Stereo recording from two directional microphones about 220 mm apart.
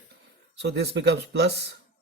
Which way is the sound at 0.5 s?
50° right (ahead or behind).